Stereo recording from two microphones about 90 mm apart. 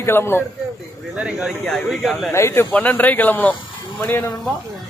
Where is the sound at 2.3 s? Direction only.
30° left (ahead or behind).